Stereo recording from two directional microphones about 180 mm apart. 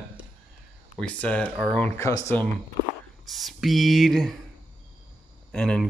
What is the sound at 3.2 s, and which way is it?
Speech, centre (ahead or behind).